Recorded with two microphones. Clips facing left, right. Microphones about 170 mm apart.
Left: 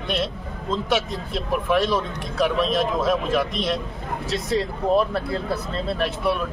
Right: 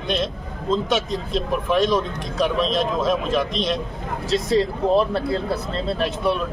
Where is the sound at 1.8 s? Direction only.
5° left (ahead or behind).